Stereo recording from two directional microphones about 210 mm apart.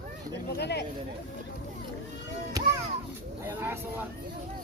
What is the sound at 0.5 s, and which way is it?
Speech, 50° left (ahead or behind).